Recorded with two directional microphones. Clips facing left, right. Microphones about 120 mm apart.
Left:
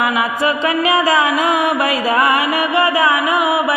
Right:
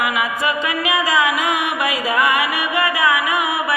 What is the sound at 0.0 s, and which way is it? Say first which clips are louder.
Music: left 4 dB; 35° left (ahead or behind).